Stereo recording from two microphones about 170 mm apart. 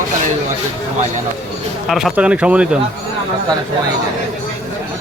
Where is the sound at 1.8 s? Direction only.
Centre (ahead or behind).